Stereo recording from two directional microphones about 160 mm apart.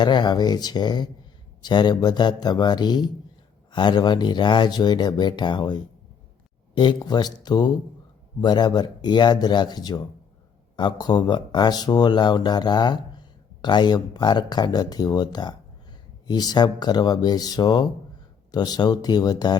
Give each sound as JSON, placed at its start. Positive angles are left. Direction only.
{"t": 0.0, "sound": "speech", "side_deg": 30}